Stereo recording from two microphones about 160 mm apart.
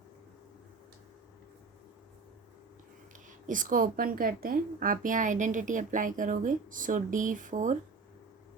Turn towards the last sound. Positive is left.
turn(degrees=-55)  # may be behind; listen again after turning